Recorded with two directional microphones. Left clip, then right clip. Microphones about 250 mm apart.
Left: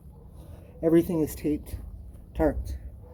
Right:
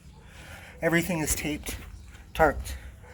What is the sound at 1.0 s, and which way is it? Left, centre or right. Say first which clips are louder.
Speech: left 2 dB; right.